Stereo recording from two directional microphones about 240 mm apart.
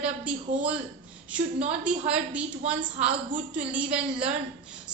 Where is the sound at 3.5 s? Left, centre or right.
Centre.